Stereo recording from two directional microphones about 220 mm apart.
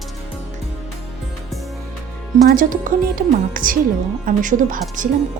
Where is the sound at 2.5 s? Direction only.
40° right (ahead or behind).